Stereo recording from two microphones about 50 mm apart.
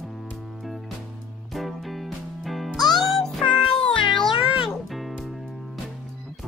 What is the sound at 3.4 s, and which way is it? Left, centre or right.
Meow, left.